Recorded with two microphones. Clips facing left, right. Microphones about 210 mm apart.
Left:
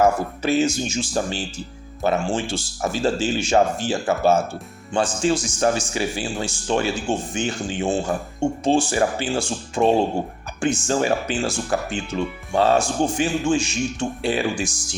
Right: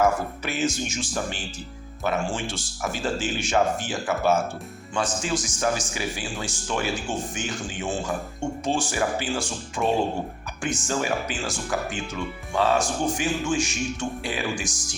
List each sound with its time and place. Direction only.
0.0 s speech: 30° left (ahead or behind)